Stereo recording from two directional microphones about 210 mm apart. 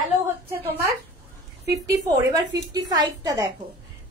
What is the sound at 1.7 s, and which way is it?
A woman's voice, 15° right (ahead or behind).